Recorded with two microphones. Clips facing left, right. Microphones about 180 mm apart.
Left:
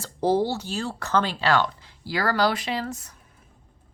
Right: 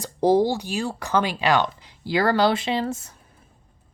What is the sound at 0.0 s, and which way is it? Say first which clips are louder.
Speech: right 4 dB; 15° right (ahead or behind).